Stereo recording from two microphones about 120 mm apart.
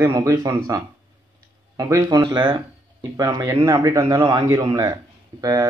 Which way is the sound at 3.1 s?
25° right (ahead or behind).